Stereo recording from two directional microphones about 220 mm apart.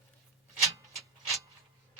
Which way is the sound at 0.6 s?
15° right (ahead or behind).